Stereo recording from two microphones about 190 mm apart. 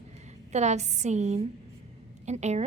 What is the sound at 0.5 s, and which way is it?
A woman's voice, 35° right (ahead or behind).